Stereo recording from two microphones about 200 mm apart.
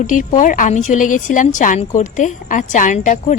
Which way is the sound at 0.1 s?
40° left (ahead or behind).